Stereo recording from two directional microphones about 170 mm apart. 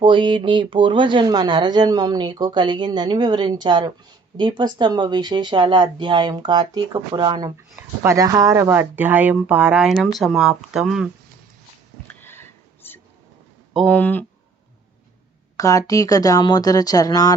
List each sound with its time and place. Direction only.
0.0 s speech: 30° right (ahead or behind); by 11.1 s centre (ahead or behind)
12.0 s a sound: 15° left (ahead or behind)
13.7 s speech: 10° left (ahead or behind)
15.5 s speech: 20° left (ahead or behind)